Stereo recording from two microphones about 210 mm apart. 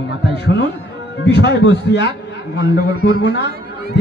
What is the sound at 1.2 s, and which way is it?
Music, 55° left (ahead or behind).